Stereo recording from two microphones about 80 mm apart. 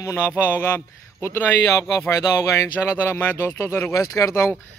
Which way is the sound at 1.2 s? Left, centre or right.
Left.